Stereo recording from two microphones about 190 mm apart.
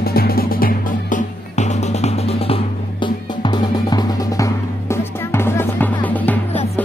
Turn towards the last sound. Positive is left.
turn(degrees=10)  # may be behind; listen again after turning